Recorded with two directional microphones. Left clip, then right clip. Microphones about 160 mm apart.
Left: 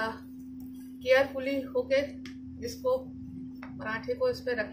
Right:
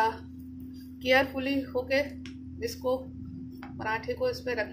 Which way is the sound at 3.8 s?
40° right (ahead or behind).